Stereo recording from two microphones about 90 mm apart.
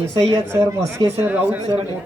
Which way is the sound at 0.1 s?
30° right (ahead or behind).